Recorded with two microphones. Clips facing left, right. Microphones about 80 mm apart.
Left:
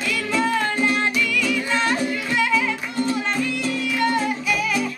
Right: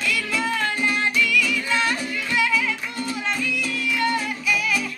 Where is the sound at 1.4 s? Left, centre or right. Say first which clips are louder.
Left 2 dB; centre.